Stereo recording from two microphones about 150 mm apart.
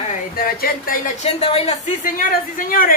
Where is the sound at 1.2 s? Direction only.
45° left (ahead or behind).